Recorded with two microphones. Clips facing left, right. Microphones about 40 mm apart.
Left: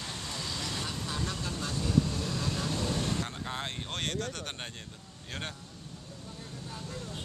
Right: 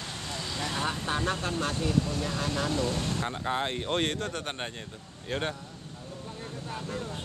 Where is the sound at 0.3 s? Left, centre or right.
Centre.